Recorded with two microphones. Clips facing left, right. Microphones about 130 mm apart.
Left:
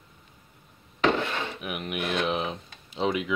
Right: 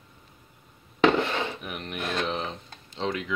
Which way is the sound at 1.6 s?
10° left (ahead or behind).